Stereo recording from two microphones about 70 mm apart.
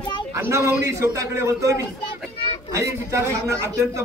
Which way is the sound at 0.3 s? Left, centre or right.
Right.